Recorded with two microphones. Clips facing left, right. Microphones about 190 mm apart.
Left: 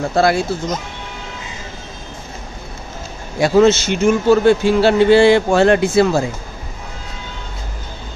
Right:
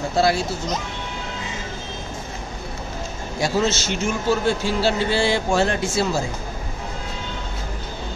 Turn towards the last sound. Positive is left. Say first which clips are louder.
# left 9 dB
turn(degrees=60)  # may be behind; listen again after turning